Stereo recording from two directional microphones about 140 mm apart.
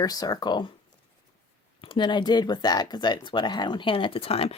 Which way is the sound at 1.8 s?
35° left (ahead or behind).